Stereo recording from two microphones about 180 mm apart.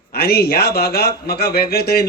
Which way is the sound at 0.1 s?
60° left (ahead or behind).